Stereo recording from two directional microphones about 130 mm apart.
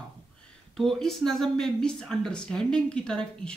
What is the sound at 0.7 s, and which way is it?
Speech, 5° left (ahead or behind).